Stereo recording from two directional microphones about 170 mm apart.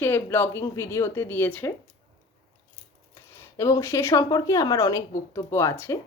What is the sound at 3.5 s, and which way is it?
Speech, 15° left (ahead or behind).